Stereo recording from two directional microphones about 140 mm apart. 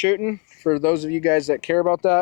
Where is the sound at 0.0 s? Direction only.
20° left (ahead or behind).